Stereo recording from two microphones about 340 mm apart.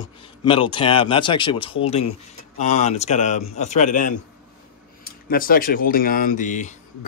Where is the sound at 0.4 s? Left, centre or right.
Centre.